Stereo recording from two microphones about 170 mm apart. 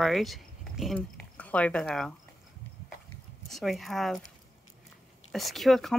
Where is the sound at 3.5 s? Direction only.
Centre (ahead or behind).